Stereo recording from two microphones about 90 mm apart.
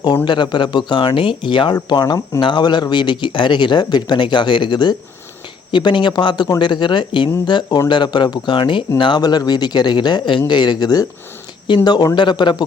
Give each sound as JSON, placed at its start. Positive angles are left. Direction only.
{"t": 0.3, "sound": "speech", "side_deg": 55}
{"t": 1.9, "sound": "speech", "side_deg": 50}